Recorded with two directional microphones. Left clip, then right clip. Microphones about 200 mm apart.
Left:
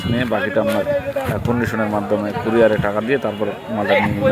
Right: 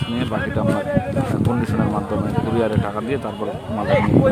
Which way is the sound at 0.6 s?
10° left (ahead or behind).